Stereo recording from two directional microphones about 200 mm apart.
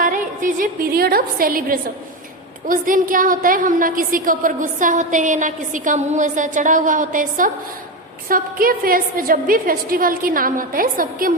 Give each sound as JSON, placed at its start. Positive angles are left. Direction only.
{"t": 0.0, "sound": "a woman's voice", "side_deg": -40}